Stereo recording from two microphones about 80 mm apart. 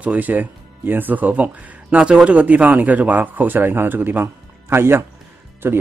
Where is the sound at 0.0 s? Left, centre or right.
Centre.